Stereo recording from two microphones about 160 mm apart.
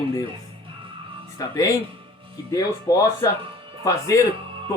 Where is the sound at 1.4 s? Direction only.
20° left (ahead or behind).